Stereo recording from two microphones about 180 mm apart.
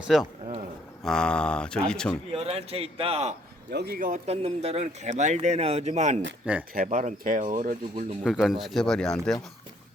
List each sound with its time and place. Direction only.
0.1 s speech: centre (ahead or behind)
2.3 s speech: 35° right (ahead or behind)
3.7 s speech: 60° right (ahead or behind)
4.3 s speech: 35° right (ahead or behind)
6.4 s speech: 5° right (ahead or behind)
6.7 s speech: 45° right (ahead or behind)
8.2 s speech: centre (ahead or behind)